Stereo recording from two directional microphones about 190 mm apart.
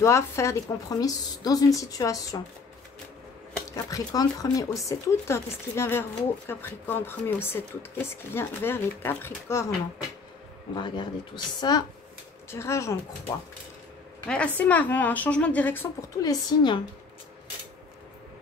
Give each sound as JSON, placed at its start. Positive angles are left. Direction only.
{"t": 0.0, "sound": "speech", "side_deg": 15}
{"t": 3.7, "sound": "speech", "side_deg": 20}
{"t": 10.8, "sound": "speech", "side_deg": 25}
{"t": 14.2, "sound": "speech", "side_deg": 5}